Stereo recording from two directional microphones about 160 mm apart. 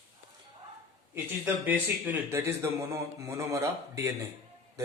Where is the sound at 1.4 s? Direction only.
10° right (ahead or behind).